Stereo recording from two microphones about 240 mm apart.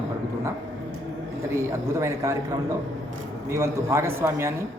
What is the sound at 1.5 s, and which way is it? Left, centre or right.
A man's voice, centre.